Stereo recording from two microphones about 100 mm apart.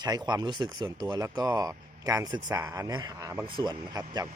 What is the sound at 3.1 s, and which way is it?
Speech, 30° right (ahead or behind).